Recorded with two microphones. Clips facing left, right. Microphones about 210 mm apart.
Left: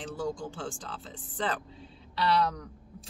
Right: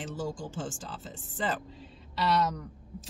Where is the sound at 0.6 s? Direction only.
Centre (ahead or behind).